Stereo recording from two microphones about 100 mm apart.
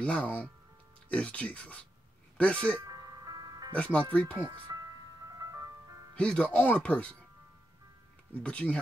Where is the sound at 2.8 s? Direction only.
40° right (ahead or behind).